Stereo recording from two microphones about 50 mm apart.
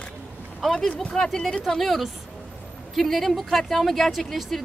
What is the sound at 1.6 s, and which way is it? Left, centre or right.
Speech, centre.